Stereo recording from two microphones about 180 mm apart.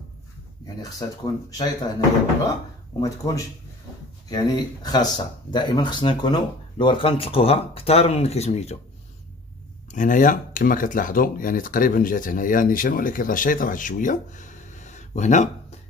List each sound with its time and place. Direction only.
0.9 s speech: 20° left (ahead or behind)
3.0 s speech: 20° left (ahead or behind); by 8.7 s 35° left (ahead or behind)
9.8 s speech: 45° left (ahead or behind)